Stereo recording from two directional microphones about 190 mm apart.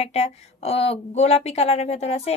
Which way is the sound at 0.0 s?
35° left (ahead or behind).